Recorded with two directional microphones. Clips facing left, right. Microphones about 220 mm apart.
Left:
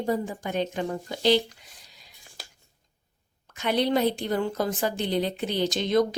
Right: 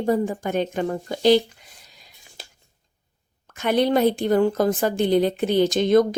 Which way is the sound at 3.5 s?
50° right (ahead or behind).